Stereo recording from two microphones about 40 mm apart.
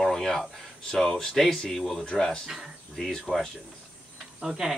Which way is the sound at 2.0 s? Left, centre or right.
Centre.